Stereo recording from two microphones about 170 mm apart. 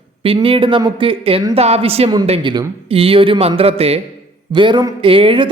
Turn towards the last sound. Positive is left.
turn(degrees=-30)  # may be behind; listen again after turning